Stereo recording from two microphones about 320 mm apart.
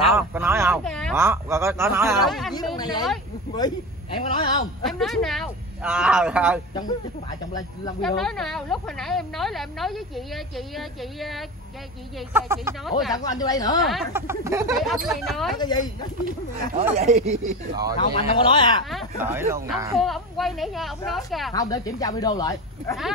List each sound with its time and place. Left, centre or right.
0.1 s speech: centre
2.5 s speech: centre
4.8 s a woman's voice: centre
8.0 s a woman's voice: centre
13.1 s speech: centre
13.8 s a woman's voice: centre
15.5 s speech: centre
16.9 s speech: centre
17.9 s speech: centre
18.9 s a woman's voice: centre
21.5 s speech: centre